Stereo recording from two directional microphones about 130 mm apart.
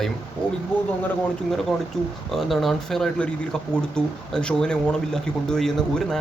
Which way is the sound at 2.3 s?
Centre (ahead or behind).